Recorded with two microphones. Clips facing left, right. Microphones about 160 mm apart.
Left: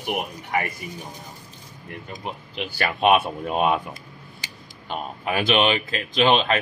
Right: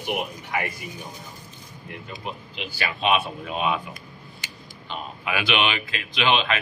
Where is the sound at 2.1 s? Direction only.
55° left (ahead or behind).